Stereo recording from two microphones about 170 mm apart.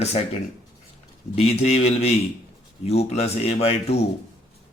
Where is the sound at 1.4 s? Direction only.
40° left (ahead or behind).